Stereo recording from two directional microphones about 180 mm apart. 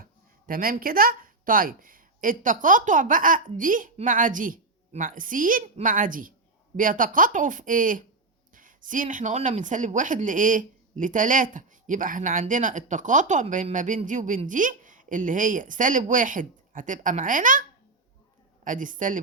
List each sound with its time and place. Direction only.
0.0 s speech: 50° right (ahead or behind)